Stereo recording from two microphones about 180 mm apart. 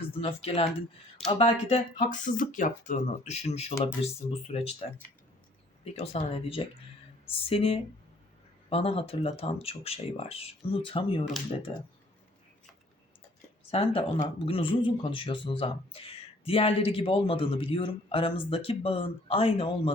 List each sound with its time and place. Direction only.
0.1 s speech: 35° left (ahead or behind)
13.7 s speech: 30° left (ahead or behind)